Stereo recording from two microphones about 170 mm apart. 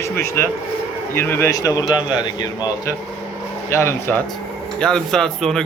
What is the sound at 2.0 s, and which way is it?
Speech, 10° right (ahead or behind).